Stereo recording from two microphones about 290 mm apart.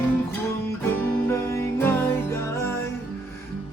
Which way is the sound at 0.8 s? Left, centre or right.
Centre.